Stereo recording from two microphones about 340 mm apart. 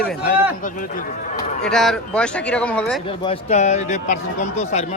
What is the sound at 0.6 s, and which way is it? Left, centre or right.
Speech, left.